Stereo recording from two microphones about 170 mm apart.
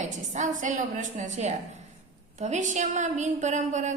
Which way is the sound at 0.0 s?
45° right (ahead or behind).